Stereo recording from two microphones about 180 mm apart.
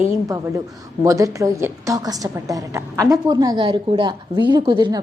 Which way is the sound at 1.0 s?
20° right (ahead or behind).